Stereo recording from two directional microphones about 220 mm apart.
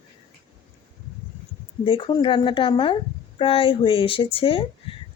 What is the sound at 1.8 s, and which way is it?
Speech, 20° left (ahead or behind).